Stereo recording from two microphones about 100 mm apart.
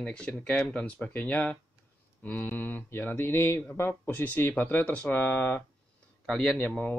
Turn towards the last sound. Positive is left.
turn(degrees=10)  # may be behind; listen again after turning